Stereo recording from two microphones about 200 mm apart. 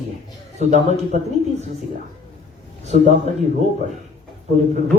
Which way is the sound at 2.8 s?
35° right (ahead or behind).